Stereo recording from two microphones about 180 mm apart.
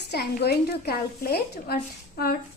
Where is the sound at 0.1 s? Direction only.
65° left (ahead or behind).